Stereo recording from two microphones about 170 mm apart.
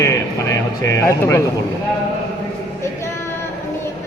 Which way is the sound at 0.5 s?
15° left (ahead or behind).